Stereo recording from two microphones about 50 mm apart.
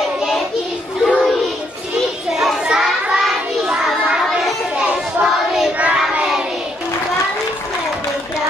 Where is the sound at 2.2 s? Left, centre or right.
Centre.